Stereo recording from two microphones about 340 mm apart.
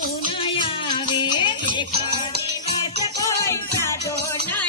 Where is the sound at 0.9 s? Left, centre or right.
Centre.